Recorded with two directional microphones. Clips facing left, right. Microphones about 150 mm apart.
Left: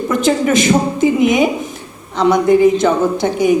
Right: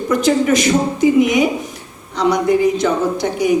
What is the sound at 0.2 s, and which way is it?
Speech, 25° left (ahead or behind).